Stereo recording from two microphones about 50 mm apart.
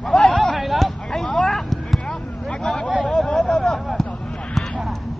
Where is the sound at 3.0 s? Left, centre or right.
Centre.